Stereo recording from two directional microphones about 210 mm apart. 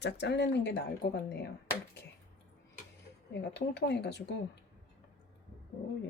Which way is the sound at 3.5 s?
55° left (ahead or behind).